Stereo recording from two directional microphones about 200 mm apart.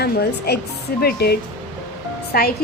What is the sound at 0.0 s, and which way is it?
A woman's voice, 55° left (ahead or behind).